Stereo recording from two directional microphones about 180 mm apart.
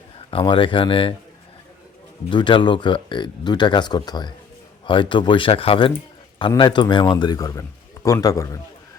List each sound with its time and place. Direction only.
0.3 s speech: 30° left (ahead or behind)
2.3 s a man's voice: 25° left (ahead or behind)